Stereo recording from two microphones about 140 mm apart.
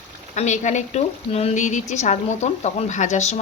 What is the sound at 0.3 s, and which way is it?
A woman's voice, 55° left (ahead or behind).